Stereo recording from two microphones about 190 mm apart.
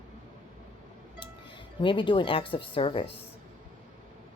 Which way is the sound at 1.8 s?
25° left (ahead or behind).